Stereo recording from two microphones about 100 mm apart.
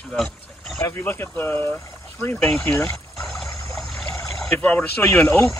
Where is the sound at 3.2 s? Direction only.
Centre (ahead or behind).